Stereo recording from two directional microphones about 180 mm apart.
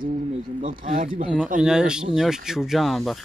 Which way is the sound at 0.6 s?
50° right (ahead or behind).